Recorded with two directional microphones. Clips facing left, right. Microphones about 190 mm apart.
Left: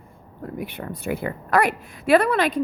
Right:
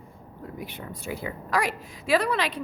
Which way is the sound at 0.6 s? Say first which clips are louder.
Left 7 dB; 60° left (ahead or behind).